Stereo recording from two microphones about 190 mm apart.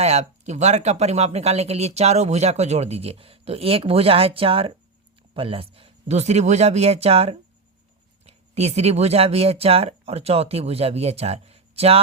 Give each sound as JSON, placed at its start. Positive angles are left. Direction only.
{"t": 0.0, "sound": "speech", "side_deg": -35}